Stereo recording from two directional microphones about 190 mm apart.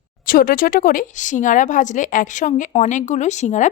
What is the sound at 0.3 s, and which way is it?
A woman's voice, 45° left (ahead or behind).